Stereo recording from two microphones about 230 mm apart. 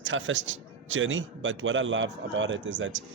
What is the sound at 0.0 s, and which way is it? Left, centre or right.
A man's voice, right.